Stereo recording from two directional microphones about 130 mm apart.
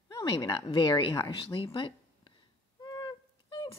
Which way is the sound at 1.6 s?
40° left (ahead or behind).